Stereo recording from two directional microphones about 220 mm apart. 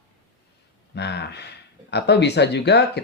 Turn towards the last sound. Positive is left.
turn(degrees=50)  # may be behind; listen again after turning